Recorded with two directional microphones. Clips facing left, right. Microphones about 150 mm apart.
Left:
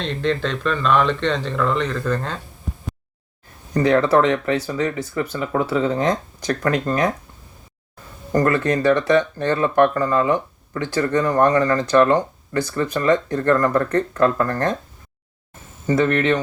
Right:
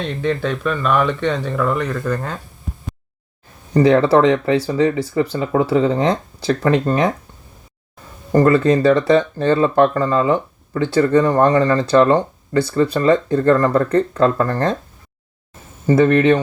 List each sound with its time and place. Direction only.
0.0 s speech: 10° right (ahead or behind)
3.8 s speech: 30° right (ahead or behind)
8.3 s speech: 25° right (ahead or behind)